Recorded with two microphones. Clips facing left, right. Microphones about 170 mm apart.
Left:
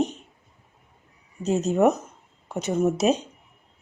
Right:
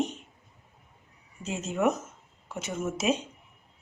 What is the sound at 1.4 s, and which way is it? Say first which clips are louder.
Speech: left 7 dB; 40° left (ahead or behind).